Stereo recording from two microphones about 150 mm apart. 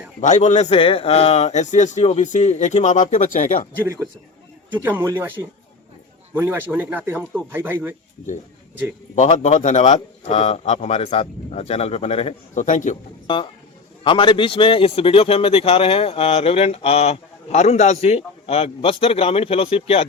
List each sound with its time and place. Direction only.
0.2 s speech: 55° left (ahead or behind)
4.7 s speech: 10° right (ahead or behind)
9.1 s speech: 50° left (ahead or behind)
12.6 s a man's voice: 55° left (ahead or behind)
13.2 s a man's voice: 35° left (ahead or behind)